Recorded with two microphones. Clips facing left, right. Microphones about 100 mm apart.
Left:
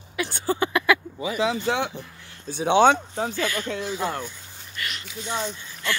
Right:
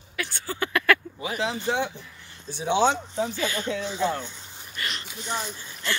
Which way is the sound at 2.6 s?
60° left (ahead or behind).